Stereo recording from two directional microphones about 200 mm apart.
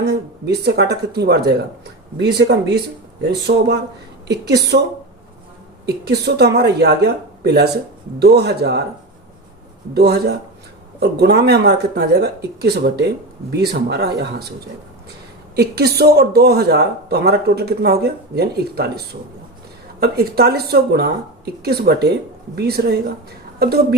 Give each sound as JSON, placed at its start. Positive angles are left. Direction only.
{"t": 0.0, "sound": "speech", "side_deg": -55}
{"t": 5.8, "sound": "speech", "side_deg": -55}
{"t": 9.9, "sound": "speech", "side_deg": -55}
{"t": 15.5, "sound": "speech", "side_deg": -50}